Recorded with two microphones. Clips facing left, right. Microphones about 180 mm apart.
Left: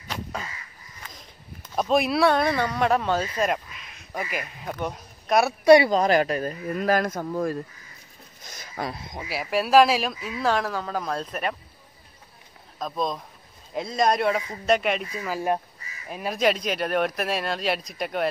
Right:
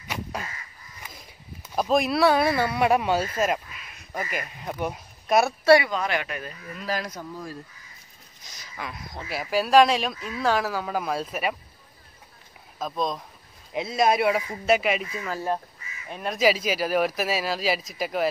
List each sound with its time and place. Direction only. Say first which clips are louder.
0.1 s crow: even; 5° right (ahead or behind)
1.0 s speech: even; 5° right (ahead or behind)
5.9 s speech: left 7 dB; 35° left (ahead or behind)
6.7 s speech: left 7 dB; 50° left (ahead or behind)
8.8 s speech: left 5 dB; 30° left (ahead or behind)
9.3 s speech: even; centre (ahead or behind)
12.7 s speech: even; centre (ahead or behind)
15.2 s speech: left 5 dB; 10° left (ahead or behind)